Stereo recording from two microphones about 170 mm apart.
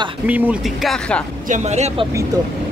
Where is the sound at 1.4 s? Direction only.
45° right (ahead or behind).